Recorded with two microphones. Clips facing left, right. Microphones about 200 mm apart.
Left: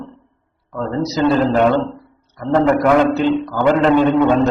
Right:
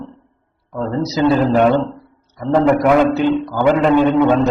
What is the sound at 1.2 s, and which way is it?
Speech, 15° right (ahead or behind).